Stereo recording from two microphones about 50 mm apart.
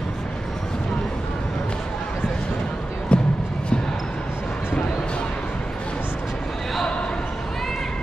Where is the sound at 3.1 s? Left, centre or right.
Left.